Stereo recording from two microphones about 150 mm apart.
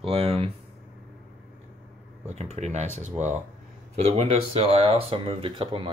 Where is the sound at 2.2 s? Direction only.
45° right (ahead or behind).